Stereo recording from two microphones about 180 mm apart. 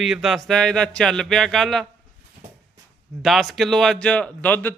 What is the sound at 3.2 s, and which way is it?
A man's voice, centre (ahead or behind).